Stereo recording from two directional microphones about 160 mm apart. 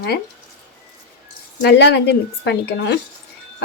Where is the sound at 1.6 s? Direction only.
90° left.